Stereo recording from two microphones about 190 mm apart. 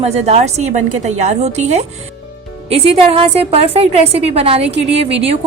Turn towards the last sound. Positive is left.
turn(degrees=-30)  # may be behind; listen again after turning